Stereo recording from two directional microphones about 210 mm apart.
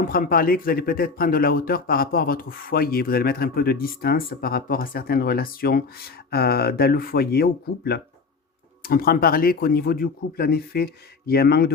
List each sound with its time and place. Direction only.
0.1 s speech: 45° left (ahead or behind)